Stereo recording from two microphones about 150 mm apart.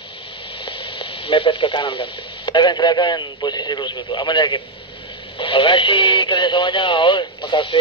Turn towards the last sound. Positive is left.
turn(degrees=35)  # may be behind; listen again after turning